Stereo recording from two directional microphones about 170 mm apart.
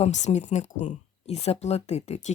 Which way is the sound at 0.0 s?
40° left (ahead or behind).